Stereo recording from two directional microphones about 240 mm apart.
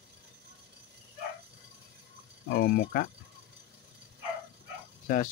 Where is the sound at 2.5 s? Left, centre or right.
Left.